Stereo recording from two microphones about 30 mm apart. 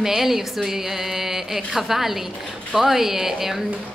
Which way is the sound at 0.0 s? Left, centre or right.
Centre.